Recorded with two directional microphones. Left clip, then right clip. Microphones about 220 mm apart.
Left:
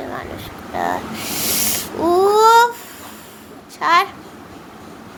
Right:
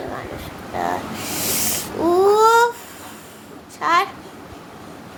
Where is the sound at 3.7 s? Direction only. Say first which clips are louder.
Left 3 dB; 15° left (ahead or behind).